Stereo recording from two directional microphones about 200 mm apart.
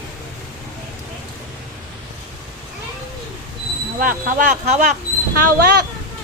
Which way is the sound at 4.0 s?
45° right (ahead or behind).